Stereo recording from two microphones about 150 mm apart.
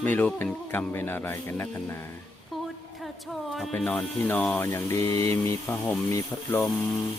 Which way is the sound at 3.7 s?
10° left (ahead or behind).